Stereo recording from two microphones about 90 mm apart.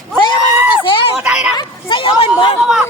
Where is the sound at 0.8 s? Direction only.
75° left (ahead or behind).